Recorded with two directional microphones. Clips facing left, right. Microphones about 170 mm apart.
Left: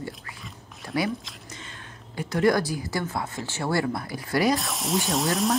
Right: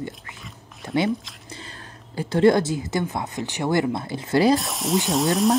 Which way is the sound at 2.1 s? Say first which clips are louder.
Right 5 dB; 30° right (ahead or behind).